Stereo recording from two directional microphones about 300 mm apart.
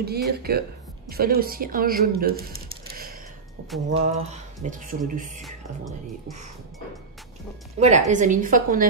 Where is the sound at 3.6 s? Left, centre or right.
Right.